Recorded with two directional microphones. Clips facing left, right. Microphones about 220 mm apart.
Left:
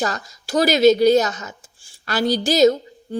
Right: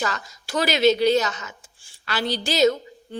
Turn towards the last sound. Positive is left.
turn(degrees=40)  # may be behind; listen again after turning